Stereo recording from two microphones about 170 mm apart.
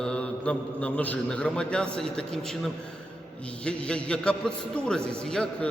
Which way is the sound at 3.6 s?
5° left (ahead or behind).